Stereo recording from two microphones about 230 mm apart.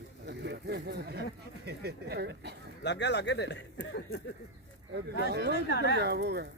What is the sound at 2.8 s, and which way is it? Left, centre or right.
Speech, left.